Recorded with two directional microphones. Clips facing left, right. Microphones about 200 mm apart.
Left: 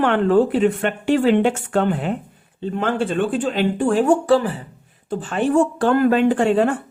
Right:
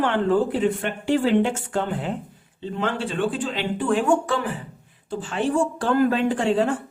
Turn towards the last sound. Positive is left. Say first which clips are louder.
# left 4 dB
turn(degrees=55)  # may be behind; listen again after turning